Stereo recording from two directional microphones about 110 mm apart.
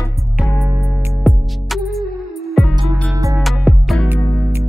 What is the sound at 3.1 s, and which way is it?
Music, 30° right (ahead or behind).